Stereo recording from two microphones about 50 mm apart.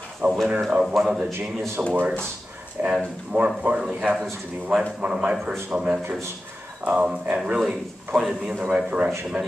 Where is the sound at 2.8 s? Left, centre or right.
Right.